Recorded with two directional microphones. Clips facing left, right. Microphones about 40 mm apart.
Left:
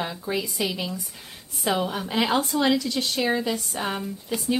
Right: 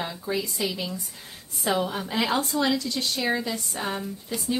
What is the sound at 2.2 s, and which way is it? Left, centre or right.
Speech, left.